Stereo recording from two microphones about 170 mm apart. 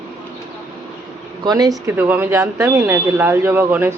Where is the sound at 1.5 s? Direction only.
20° right (ahead or behind).